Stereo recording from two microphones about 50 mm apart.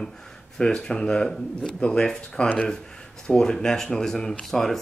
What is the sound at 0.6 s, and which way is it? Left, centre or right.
Speech, centre.